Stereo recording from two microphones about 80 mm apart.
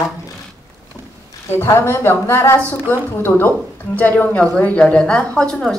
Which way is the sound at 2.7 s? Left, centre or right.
Left.